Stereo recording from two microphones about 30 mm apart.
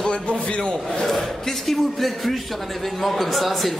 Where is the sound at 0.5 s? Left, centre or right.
Left.